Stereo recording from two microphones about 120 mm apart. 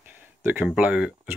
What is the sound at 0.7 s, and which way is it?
Speech, 10° right (ahead or behind).